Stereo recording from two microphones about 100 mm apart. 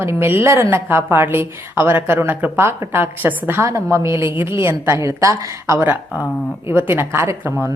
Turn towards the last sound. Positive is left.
turn(degrees=-20)  # may be behind; listen again after turning